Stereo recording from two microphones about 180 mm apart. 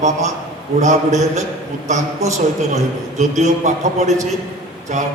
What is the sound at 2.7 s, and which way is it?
A man's voice, 40° right (ahead or behind).